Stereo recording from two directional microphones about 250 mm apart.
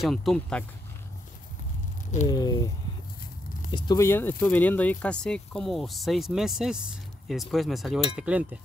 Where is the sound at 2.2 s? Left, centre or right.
Centre.